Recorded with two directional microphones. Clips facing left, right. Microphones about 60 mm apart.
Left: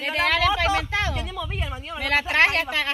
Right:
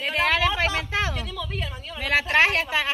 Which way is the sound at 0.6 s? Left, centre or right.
Centre.